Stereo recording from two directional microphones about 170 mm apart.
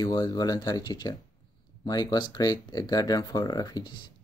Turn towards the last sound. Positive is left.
turn(degrees=20)  # may be behind; listen again after turning